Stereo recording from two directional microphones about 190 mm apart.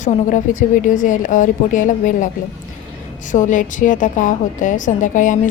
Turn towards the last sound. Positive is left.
turn(degrees=40)  # may be behind; listen again after turning